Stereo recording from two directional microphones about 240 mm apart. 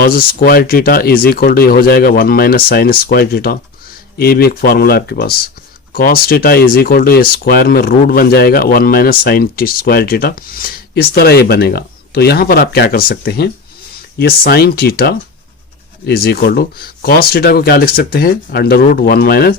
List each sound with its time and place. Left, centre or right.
0.0 s speech: left